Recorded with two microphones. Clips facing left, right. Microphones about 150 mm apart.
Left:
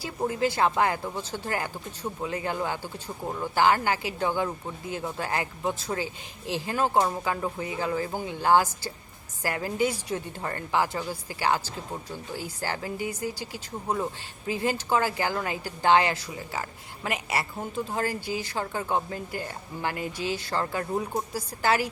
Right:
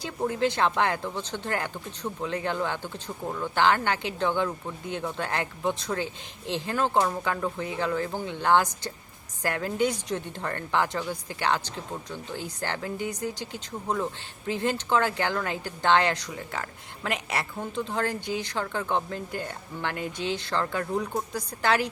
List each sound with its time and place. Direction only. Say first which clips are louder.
0.0 s a woman's voice: even; 5° left (ahead or behind)